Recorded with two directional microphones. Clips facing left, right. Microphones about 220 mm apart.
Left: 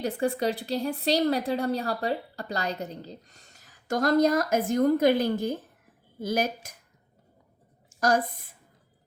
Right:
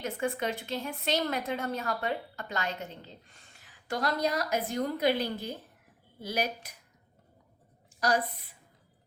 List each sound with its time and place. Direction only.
0.0 s a woman's voice: 35° left (ahead or behind)
7.9 s a woman's voice: 45° left (ahead or behind)